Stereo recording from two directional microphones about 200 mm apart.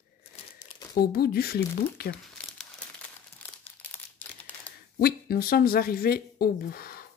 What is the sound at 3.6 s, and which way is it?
Crumpling, 10° left (ahead or behind).